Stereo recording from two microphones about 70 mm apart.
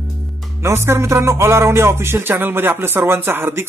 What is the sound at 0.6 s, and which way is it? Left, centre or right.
Speech, right.